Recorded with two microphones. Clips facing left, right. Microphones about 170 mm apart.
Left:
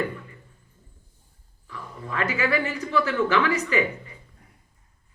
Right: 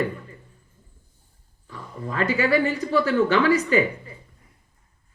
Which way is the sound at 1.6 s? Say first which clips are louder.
Right 3 dB; 35° right (ahead or behind).